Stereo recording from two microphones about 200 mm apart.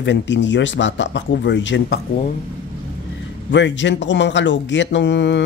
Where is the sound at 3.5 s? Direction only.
65° left (ahead or behind).